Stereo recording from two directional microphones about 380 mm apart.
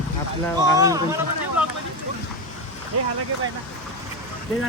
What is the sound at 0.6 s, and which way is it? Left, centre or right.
Speech, centre.